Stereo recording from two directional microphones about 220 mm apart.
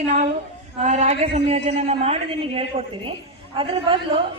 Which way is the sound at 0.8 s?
30° right (ahead or behind).